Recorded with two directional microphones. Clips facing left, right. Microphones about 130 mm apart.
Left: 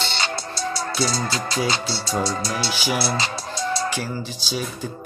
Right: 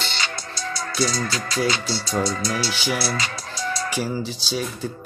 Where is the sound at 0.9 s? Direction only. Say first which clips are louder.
Right 3 dB; 25° left (ahead or behind).